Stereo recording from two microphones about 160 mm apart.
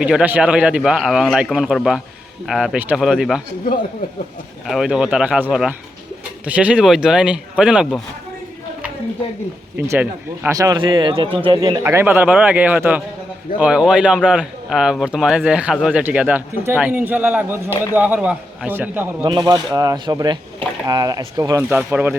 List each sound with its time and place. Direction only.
0.0 s a man's voice: 5° right (ahead or behind)
4.6 s a man's voice: centre (ahead or behind)
9.7 s speech: 15° right (ahead or behind); by 11.8 s 30° right (ahead or behind)
11.8 s speech: 15° right (ahead or behind)
19.2 s speech: 30° right (ahead or behind)
21.7 s speech: 10° right (ahead or behind)